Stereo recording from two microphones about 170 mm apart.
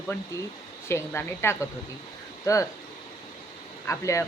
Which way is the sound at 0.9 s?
15° left (ahead or behind).